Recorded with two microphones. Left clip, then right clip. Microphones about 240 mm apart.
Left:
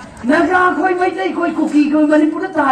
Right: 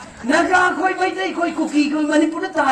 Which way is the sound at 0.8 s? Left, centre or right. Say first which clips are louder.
Left 4 dB; right.